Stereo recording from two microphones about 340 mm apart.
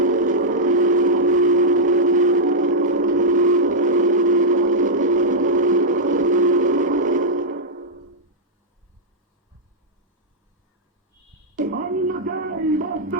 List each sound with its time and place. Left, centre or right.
0.0 s vehicle: right
11.5 s a sound: right
12.2 s music: right